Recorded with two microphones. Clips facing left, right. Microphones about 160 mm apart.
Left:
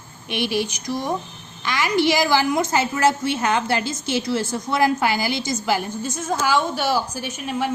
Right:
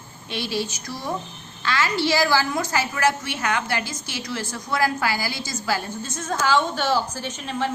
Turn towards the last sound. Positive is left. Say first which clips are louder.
# left 2 dB
turn(degrees=10)  # may be behind; listen again after turning